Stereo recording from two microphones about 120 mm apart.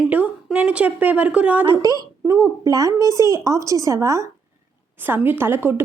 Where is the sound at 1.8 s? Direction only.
30° right (ahead or behind).